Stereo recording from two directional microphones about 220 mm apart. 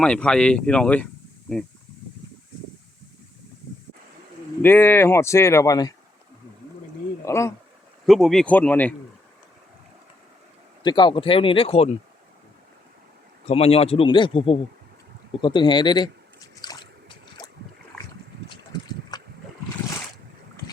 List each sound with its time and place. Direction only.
0.0 s speech: 5° left (ahead or behind)
4.6 s speech: 10° left (ahead or behind)
7.3 s speech: 15° left (ahead or behind)
8.0 s speech: centre (ahead or behind)
10.8 s speech: 20° left (ahead or behind)
13.5 s speech: 25° left (ahead or behind)
16.6 s drip: 20° left (ahead or behind)
17.9 s boat: 5° left (ahead or behind)
18.4 s boat: 20° left (ahead or behind)